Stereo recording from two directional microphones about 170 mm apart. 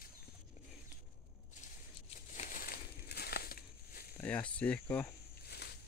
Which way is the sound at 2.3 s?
50° left (ahead or behind).